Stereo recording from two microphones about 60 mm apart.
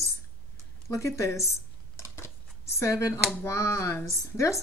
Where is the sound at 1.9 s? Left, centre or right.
Left.